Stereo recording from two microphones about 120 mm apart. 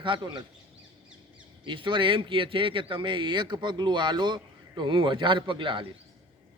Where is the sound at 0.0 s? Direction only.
40° right (ahead or behind).